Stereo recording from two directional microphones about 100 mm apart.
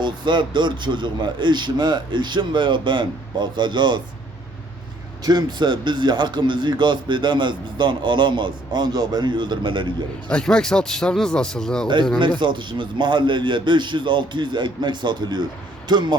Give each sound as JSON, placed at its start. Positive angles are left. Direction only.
{"t": 0.0, "sound": "a man's voice", "side_deg": -50}
{"t": 5.2, "sound": "a man's voice", "side_deg": -40}
{"t": 10.2, "sound": "a man's voice", "side_deg": 10}
{"t": 12.4, "sound": "a man's voice", "side_deg": -50}